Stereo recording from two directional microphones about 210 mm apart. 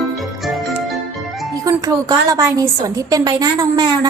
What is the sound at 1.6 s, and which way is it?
A woman's voice, 15° right (ahead or behind).